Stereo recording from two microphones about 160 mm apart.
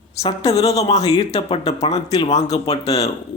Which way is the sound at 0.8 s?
45° left (ahead or behind).